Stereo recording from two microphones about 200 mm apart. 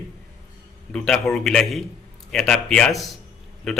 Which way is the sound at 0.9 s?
5° left (ahead or behind).